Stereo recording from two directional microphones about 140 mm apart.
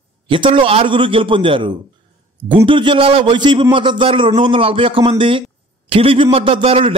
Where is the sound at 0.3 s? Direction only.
40° right (ahead or behind).